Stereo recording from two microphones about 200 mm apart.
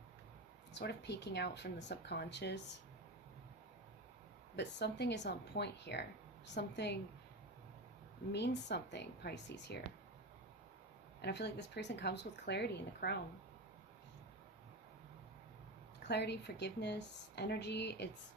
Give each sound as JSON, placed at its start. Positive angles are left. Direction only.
{"t": 0.7, "sound": "speech", "side_deg": 55}
{"t": 4.5, "sound": "speech", "side_deg": 60}
{"t": 8.3, "sound": "speech", "side_deg": 60}
{"t": 11.2, "sound": "speech", "side_deg": 55}
{"t": 16.0, "sound": "speech", "side_deg": 55}